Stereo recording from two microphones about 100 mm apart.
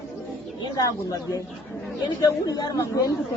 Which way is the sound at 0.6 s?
35° left (ahead or behind).